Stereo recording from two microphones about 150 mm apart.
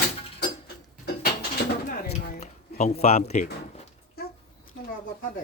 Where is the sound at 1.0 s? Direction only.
90° left.